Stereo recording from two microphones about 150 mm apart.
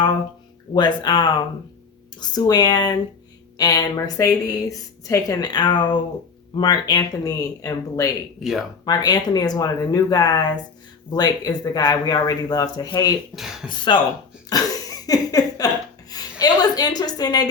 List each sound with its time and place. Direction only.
0.7 s speech: 30° left (ahead or behind)
2.3 s a woman's voice: 25° left (ahead or behind)
8.4 s speech: centre (ahead or behind)
8.8 s a woman's voice: 25° left (ahead or behind)
13.3 s speech: centre (ahead or behind)
13.7 s speech: 30° left (ahead or behind)
14.5 s a sound: 25° left (ahead or behind)